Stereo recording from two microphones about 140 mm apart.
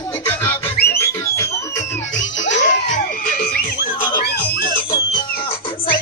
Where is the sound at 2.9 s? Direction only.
90° left.